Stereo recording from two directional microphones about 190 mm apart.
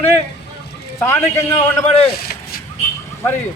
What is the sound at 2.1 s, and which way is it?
Vehicle, 55° left (ahead or behind).